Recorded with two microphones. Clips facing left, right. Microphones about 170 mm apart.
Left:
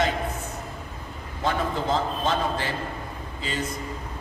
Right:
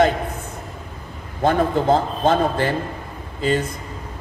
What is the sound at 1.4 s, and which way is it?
A man's voice, 55° right (ahead or behind).